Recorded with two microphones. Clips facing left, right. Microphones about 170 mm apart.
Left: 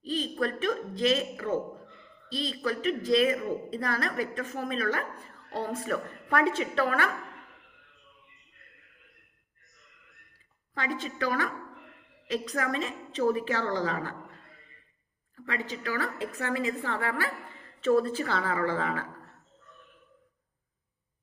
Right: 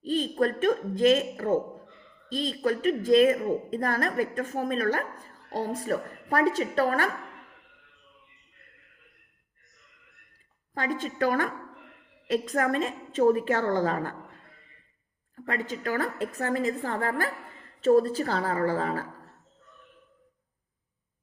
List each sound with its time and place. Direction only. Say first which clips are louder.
0.0 s a woman's voice: right 5 dB; 45° right (ahead or behind)
10.8 s a woman's voice: right 4 dB; 45° right (ahead or behind)
15.4 s a woman's voice: right 3 dB; 45° right (ahead or behind)